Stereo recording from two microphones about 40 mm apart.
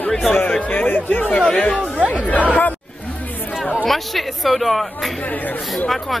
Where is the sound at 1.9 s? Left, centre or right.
Right.